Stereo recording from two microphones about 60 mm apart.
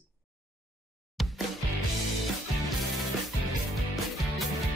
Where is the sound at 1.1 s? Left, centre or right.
Centre.